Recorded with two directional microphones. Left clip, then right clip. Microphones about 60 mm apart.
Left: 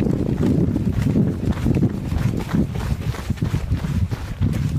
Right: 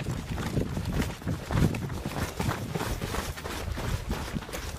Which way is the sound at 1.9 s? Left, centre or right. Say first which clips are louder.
Left 6 dB; centre.